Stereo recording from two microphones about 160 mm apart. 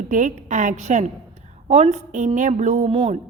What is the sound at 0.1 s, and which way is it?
A woman's voice, 50° right (ahead or behind).